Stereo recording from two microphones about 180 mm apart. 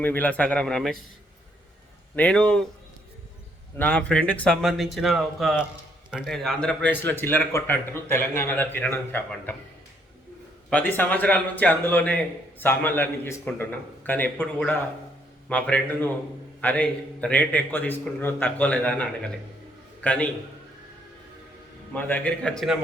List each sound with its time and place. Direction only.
0.0 s a man's voice: 10° left (ahead or behind)
2.1 s a man's voice: 5° left (ahead or behind)
3.8 s a man's voice: 5° left (ahead or behind)
10.7 s a man's voice: 10° left (ahead or behind)
15.4 s a man's voice: 5° left (ahead or behind)
21.9 s a man's voice: 10° left (ahead or behind)